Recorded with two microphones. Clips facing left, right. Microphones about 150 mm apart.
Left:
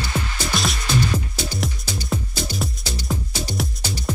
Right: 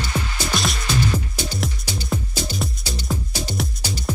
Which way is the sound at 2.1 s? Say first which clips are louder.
Even; centre (ahead or behind).